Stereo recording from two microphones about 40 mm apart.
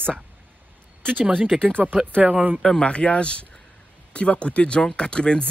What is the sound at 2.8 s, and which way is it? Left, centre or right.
Speech, left.